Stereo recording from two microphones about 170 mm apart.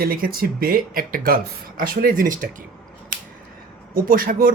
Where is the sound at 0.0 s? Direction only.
60° right (ahead or behind).